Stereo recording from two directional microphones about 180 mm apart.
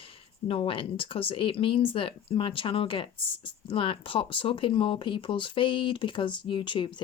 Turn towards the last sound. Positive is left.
turn(degrees=25)  # may be behind; listen again after turning